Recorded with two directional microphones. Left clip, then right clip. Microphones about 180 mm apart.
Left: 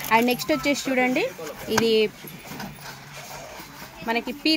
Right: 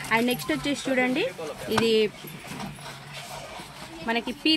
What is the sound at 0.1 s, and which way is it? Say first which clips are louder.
Speech: left 4 dB; 55° left (ahead or behind).